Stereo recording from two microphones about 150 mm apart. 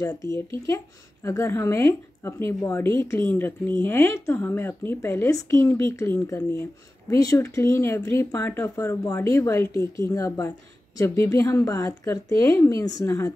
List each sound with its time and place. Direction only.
0.0 s speech: 20° left (ahead or behind)